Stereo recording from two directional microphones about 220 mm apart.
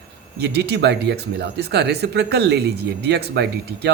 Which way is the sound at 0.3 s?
50° right (ahead or behind).